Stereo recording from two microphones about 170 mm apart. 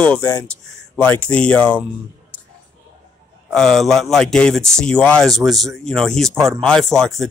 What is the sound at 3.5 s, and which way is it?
Speech, centre (ahead or behind).